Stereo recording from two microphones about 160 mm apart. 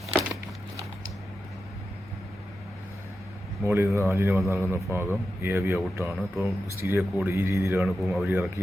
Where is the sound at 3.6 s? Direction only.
15° right (ahead or behind).